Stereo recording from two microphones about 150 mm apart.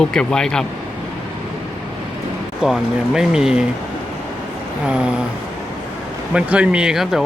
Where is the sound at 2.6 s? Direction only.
5° right (ahead or behind).